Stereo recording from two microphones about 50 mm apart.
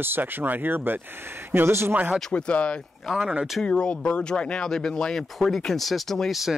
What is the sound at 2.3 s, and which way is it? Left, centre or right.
Speech, left.